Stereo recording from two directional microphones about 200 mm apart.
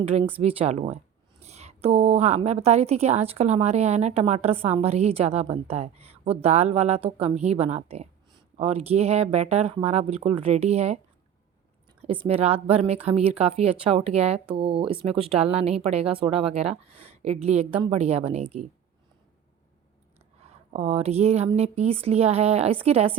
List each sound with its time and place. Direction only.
0.0 s a woman's voice: 30° right (ahead or behind)
12.0 s a woman's voice: 30° right (ahead or behind)
20.7 s a woman's voice: 30° right (ahead or behind)